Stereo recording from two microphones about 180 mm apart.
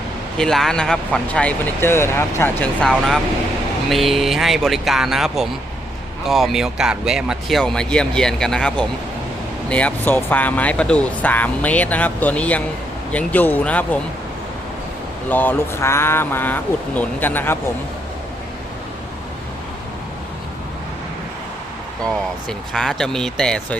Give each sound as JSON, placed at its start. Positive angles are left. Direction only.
{"t": 0.3, "sound": "speech", "side_deg": 0}
{"t": 3.8, "sound": "speech", "side_deg": 0}
{"t": 15.3, "sound": "speech", "side_deg": 10}
{"t": 22.0, "sound": "speech", "side_deg": 5}